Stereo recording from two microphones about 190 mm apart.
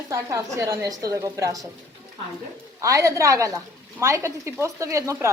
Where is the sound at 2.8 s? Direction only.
15° right (ahead or behind).